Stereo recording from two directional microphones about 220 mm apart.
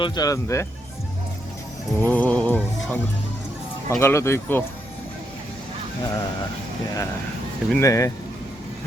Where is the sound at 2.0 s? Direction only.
5° left (ahead or behind).